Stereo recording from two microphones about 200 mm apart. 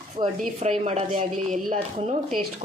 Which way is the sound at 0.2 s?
40° right (ahead or behind).